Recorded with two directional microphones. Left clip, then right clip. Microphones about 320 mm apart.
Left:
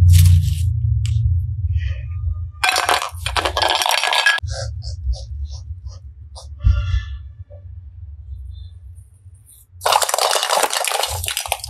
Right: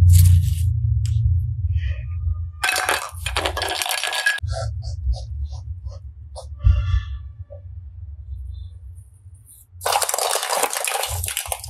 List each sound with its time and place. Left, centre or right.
0.0 s a sound: centre
2.6 s chink: centre
9.8 s drip: centre